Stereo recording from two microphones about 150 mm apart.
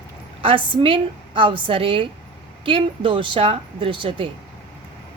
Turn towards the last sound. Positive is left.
turn(degrees=-35)  # may be behind; listen again after turning